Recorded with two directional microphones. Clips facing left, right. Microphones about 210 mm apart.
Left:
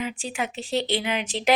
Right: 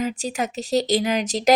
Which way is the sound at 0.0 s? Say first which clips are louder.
Right 4 dB; 40° right (ahead or behind).